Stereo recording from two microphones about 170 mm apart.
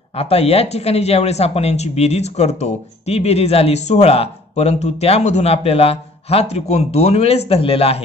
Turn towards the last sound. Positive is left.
turn(degrees=35)  # may be behind; listen again after turning